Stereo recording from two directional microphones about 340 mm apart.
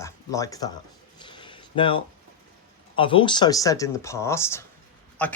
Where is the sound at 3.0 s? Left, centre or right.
Centre.